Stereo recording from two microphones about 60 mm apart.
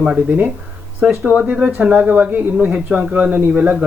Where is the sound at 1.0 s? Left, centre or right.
Right.